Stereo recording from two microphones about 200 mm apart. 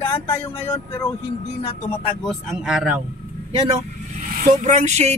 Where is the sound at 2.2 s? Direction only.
5° right (ahead or behind).